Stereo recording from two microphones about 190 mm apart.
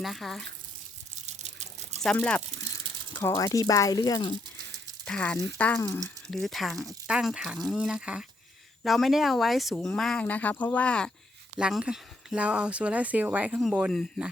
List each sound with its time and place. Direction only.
0.0 s speech: centre (ahead or behind)
1.1 s water: 35° right (ahead or behind)
2.0 s speech: 5° left (ahead or behind); by 4.4 s 20° left (ahead or behind)
5.0 s speech: 5° left (ahead or behind)